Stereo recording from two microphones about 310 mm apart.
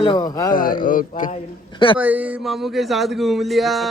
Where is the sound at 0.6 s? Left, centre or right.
Left.